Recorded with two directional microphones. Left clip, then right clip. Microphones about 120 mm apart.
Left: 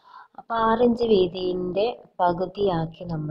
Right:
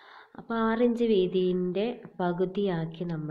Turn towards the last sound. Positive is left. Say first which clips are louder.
# left 6 dB
turn(degrees=30)  # may be behind; listen again after turning